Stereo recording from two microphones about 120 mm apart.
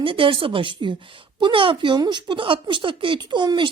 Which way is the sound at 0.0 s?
45° right (ahead or behind).